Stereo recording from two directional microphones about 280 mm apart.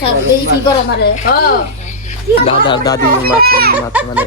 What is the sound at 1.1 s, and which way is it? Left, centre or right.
Speech, left.